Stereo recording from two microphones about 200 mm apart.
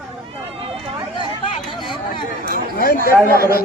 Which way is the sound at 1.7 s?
25° left (ahead or behind).